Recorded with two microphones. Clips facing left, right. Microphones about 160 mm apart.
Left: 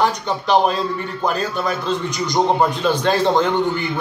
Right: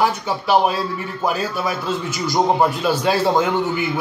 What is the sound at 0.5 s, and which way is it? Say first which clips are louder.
A man's voice: left 1 dB; 5° right (ahead or behind).